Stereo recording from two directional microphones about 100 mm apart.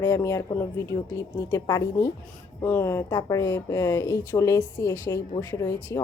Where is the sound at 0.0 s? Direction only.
30° left (ahead or behind).